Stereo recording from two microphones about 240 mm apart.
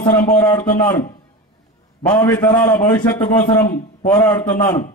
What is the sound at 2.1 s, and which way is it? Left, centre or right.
A man's voice, centre.